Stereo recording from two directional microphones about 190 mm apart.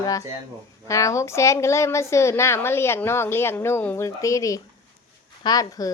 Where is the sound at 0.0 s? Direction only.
20° left (ahead or behind).